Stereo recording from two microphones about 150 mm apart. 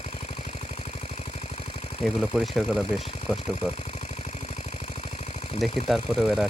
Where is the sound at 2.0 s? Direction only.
Centre (ahead or behind).